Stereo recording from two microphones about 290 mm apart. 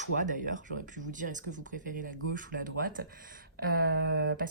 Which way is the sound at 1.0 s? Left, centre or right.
Right.